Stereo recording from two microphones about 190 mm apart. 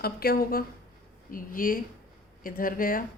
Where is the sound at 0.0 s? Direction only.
55° left (ahead or behind).